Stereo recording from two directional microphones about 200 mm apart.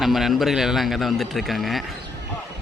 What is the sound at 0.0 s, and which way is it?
A man's voice, centre (ahead or behind).